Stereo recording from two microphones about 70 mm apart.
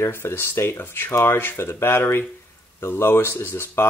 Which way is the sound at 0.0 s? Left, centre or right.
Left.